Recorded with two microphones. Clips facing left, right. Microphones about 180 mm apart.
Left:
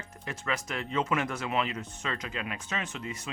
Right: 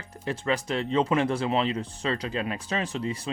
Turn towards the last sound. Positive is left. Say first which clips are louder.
# right 7 dB
turn(degrees=-30)  # may be behind; listen again after turning